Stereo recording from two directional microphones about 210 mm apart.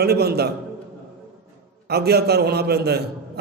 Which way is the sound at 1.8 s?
50° right (ahead or behind).